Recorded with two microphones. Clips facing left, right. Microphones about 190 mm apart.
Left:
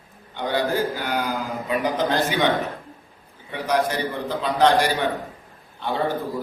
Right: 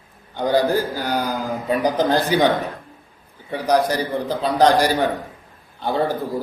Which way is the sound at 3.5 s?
35° right (ahead or behind).